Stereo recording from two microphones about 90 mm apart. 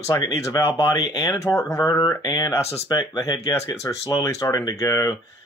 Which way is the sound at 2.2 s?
55° left (ahead or behind).